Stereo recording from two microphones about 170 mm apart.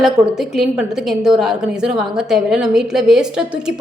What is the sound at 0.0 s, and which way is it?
A woman's voice, centre (ahead or behind).